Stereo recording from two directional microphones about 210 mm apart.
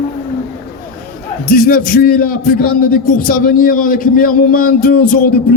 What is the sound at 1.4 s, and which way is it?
A man's voice, 45° left (ahead or behind).